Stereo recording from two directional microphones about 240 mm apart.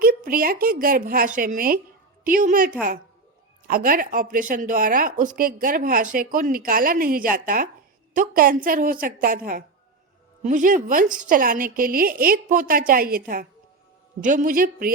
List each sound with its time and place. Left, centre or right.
0.0 s a woman's voice: right